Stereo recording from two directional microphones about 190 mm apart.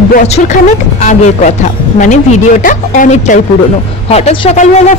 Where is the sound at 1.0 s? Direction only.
40° left (ahead or behind).